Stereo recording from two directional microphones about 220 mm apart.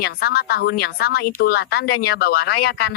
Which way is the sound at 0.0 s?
45° left (ahead or behind).